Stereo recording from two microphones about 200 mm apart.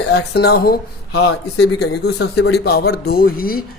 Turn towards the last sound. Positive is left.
turn(degrees=50)  # may be behind; listen again after turning